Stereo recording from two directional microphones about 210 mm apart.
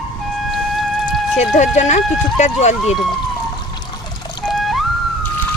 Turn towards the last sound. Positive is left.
turn(degrees=0)  # may be behind; listen again after turning